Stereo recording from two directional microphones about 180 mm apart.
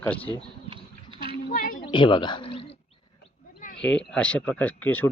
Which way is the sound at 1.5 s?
50° left (ahead or behind).